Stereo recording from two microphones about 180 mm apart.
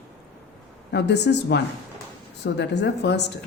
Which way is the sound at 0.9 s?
70° left (ahead or behind).